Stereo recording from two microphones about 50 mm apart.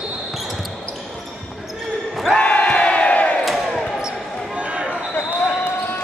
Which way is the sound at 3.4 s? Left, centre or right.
Centre.